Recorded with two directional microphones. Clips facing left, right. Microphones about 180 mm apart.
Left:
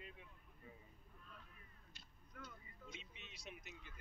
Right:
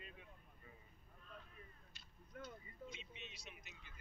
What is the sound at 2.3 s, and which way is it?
Speech, 30° right (ahead or behind).